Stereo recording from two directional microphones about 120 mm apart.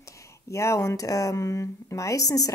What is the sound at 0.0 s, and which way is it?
Speech, 25° left (ahead or behind).